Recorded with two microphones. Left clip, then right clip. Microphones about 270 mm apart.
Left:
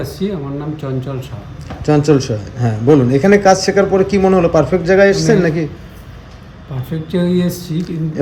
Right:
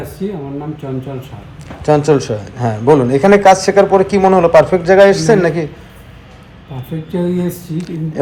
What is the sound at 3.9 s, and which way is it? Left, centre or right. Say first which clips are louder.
A man's voice: right 2 dB; centre.